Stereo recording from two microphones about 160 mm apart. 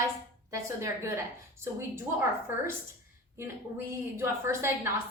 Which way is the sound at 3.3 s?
15° right (ahead or behind).